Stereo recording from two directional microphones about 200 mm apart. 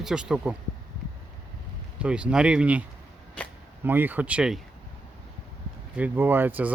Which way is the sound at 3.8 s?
10° right (ahead or behind).